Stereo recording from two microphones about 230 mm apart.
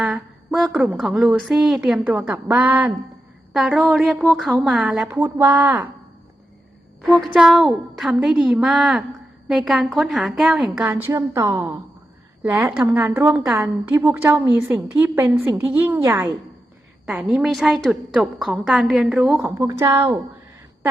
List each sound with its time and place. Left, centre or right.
0.0 s a woman's voice: centre
7.3 s a woman's voice: centre